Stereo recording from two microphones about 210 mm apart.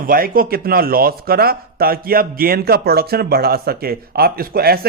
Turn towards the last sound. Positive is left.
turn(degrees=-45)  # may be behind; listen again after turning